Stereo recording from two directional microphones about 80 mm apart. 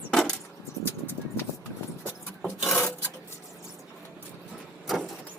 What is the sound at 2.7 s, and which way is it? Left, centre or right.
Filing, left.